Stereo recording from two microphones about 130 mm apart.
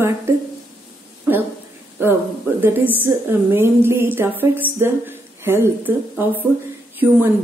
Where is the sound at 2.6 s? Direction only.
15° right (ahead or behind).